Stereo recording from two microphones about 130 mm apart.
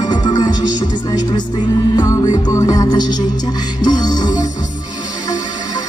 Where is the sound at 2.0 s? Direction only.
30° left (ahead or behind).